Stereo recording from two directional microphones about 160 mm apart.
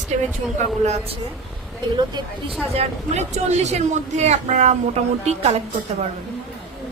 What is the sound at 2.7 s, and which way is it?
Speech, 45° right (ahead or behind).